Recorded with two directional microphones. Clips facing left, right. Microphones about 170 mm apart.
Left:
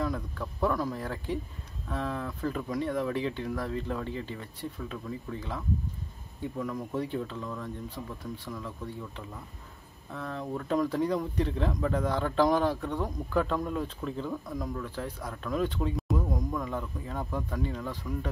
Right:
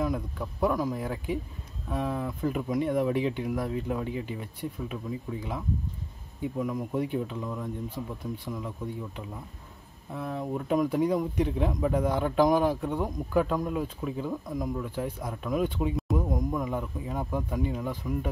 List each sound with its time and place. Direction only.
0.0 s speech: 15° right (ahead or behind)